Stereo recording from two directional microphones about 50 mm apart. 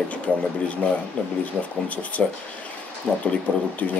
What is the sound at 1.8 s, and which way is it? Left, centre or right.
Speech, left.